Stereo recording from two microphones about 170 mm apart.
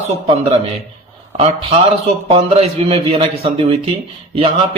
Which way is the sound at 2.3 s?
35° right (ahead or behind).